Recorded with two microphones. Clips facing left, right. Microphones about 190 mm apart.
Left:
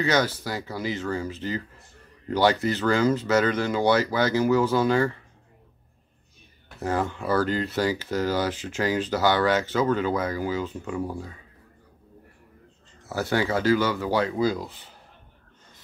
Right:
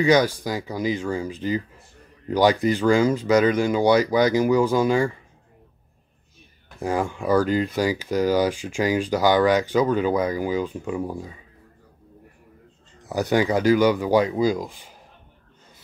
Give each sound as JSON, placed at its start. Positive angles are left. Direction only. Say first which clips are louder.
{"t": 0.0, "sound": "speech", "louder": "right 5 dB", "side_deg": -15}
{"t": 6.8, "sound": "speech", "louder": "right 2 dB", "side_deg": -10}
{"t": 13.0, "sound": "speech", "louder": "right 4 dB", "side_deg": -15}